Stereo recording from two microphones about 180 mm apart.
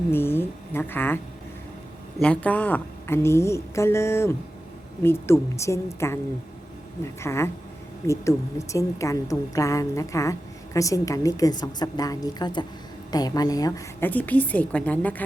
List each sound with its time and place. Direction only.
0.1 s a woman's voice: 10° left (ahead or behind)